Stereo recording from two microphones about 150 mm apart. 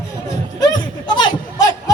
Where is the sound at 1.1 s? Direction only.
30° left (ahead or behind).